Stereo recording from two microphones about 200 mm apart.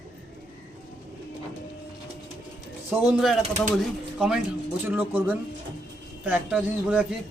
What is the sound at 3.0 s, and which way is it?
A man's voice, centre (ahead or behind).